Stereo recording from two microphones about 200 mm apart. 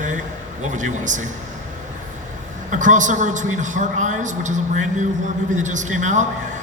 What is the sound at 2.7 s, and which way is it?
A man's voice, 40° right (ahead or behind).